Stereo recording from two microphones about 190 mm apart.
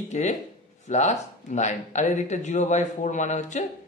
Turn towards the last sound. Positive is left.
turn(degrees=40)  # may be behind; listen again after turning